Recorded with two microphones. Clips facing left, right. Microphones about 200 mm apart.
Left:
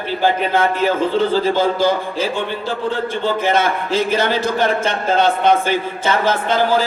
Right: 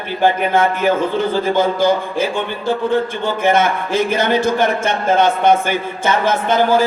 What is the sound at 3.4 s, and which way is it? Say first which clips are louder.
A man's voice: right 5 dB; 50° right (ahead or behind).